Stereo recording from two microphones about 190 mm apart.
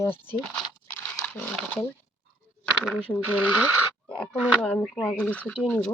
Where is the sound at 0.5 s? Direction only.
5° left (ahead or behind).